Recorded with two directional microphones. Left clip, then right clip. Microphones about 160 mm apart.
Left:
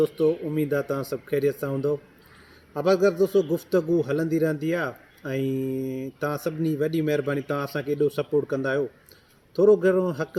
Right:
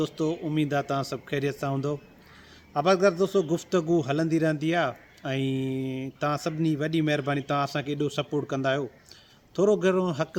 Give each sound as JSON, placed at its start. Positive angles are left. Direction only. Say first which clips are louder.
{"t": 0.0, "sound": "speech", "louder": "left 6 dB", "side_deg": -25}